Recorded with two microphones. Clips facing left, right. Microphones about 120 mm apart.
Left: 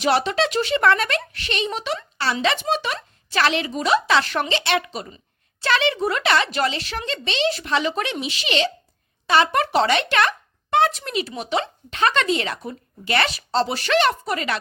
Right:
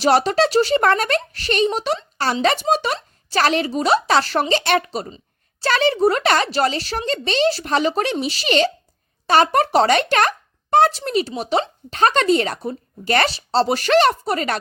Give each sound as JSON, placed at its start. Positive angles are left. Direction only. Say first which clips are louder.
{"t": 0.0, "sound": "speech", "louder": "right 4 dB", "side_deg": -40}